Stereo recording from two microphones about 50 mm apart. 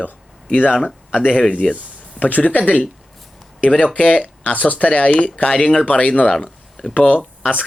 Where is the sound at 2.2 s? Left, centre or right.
Left.